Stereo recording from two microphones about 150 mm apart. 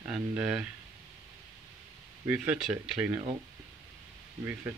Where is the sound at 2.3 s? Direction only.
10° right (ahead or behind).